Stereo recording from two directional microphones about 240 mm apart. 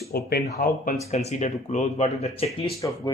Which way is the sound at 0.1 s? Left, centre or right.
Left.